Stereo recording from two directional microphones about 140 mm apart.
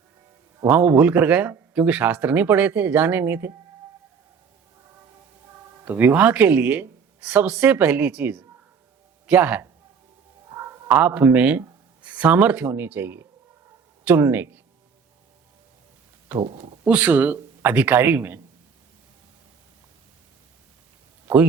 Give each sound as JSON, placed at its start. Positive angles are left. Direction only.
{"t": 0.6, "sound": "speech", "side_deg": -15}
{"t": 5.8, "sound": "speech", "side_deg": -10}
{"t": 16.4, "sound": "speech", "side_deg": -40}
{"t": 16.8, "sound": "speech", "side_deg": -10}